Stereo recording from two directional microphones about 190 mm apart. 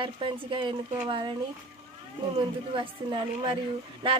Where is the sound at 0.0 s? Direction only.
25° right (ahead or behind).